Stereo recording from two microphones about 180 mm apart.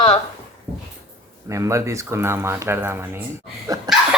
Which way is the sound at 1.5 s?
15° right (ahead or behind).